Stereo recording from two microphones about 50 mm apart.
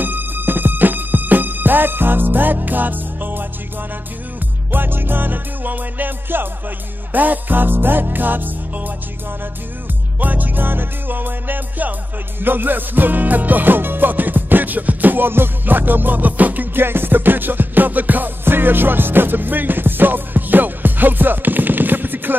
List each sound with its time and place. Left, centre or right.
0.0 s music: right
4.6 s music: right
10.2 s music: right
16.7 s music: right